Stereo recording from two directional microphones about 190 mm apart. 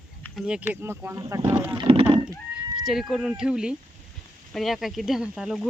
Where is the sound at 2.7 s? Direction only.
Centre (ahead or behind).